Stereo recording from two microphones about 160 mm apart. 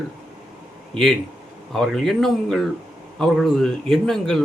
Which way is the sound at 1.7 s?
Centre (ahead or behind).